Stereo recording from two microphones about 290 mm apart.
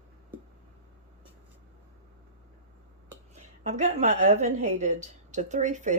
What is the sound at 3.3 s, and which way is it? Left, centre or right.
A woman's voice, right.